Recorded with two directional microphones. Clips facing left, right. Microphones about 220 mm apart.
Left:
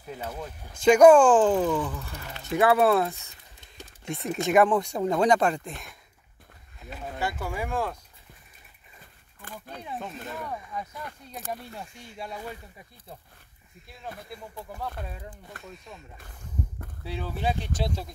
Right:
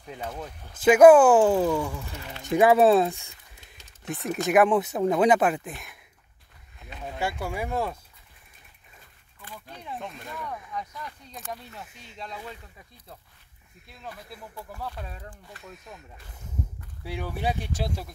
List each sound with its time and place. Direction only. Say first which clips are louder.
0.0 s speech: even; 5° left (ahead or behind); by 3.2 s 20° right (ahead or behind)
4.1 s speech: even; centre (ahead or behind)
7.5 s speech: even; 15° right (ahead or behind)
9.4 s speech: left 2 dB; 50° left (ahead or behind)
10.3 s speech: even; 25° left (ahead or behind)
12.0 s speech: left 1 dB; 10° left (ahead or behind)
15.6 s speech: right 1 dB; centre (ahead or behind)
17.0 s speech: even; 15° right (ahead or behind)